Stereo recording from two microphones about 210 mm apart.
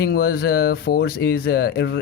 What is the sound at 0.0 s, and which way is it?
Speech, 50° left (ahead or behind).